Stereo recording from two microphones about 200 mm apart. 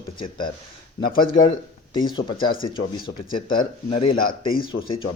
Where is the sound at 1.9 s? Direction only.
25° left (ahead or behind).